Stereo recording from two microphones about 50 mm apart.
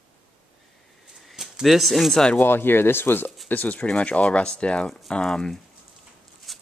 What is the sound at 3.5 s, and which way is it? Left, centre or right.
Speech, left.